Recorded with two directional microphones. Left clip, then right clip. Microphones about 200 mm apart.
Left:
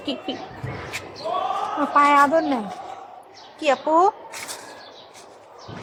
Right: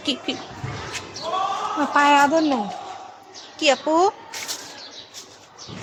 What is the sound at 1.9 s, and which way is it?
Speech, 50° right (ahead or behind).